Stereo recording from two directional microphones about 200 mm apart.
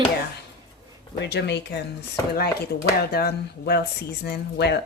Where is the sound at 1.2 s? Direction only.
60° left (ahead or behind).